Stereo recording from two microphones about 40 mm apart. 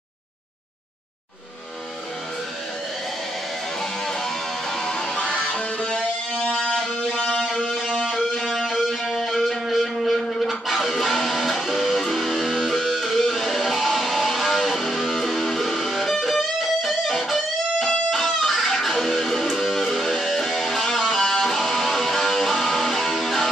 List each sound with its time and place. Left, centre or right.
4.0 s music: centre
7.7 s music: centre